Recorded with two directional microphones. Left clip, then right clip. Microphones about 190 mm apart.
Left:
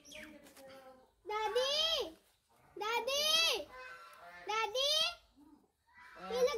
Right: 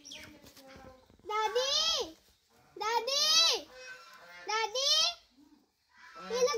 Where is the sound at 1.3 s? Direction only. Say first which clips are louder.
Right 4 dB; 30° right (ahead or behind).